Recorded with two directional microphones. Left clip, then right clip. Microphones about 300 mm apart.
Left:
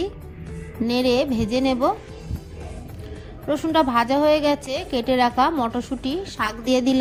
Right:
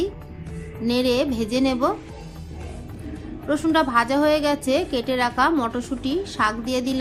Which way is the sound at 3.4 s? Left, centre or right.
Left.